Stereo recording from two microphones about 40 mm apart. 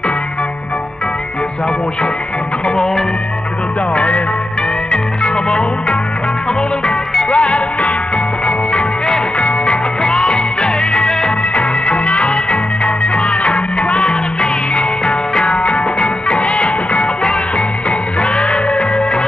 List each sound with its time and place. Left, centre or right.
3.9 s music: left
4.9 s music: left
7.2 s music: left